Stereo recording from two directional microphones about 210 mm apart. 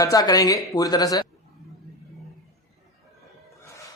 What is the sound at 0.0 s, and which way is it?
Speech, 15° left (ahead or behind).